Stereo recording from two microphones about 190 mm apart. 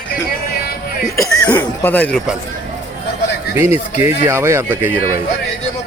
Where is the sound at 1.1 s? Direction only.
15° left (ahead or behind).